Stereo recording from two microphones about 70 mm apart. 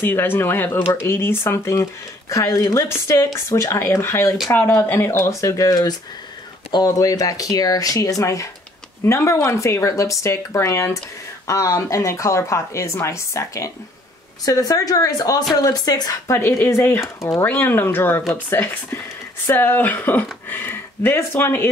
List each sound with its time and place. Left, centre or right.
0.0 s speech: left
6.9 s speech: left
14.4 s speech: left
16.3 s speech: left
17.2 s speech: left
17.5 s speech: left